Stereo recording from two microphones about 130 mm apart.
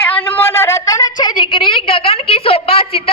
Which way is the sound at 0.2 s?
15° left (ahead or behind).